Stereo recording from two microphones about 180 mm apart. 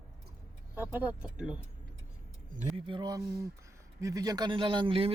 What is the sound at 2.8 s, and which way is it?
Speech, 25° right (ahead or behind).